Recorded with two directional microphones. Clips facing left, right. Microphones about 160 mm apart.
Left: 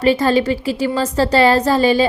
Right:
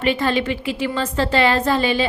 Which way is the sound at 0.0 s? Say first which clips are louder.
Left 5 dB; 40° left (ahead or behind).